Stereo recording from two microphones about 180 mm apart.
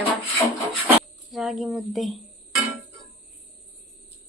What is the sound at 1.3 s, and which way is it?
Speech, centre (ahead or behind).